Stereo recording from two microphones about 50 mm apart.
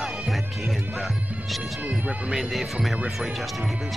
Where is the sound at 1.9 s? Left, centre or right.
Right.